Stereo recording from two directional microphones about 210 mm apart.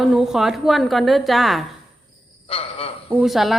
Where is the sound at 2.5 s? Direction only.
30° left (ahead or behind).